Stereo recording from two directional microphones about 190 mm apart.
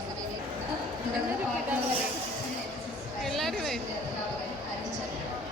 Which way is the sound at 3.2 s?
Centre (ahead or behind).